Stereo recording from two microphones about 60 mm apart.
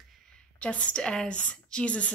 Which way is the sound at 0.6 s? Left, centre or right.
Centre.